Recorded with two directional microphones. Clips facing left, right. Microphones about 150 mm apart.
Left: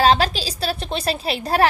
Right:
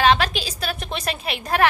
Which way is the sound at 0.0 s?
35° left (ahead or behind).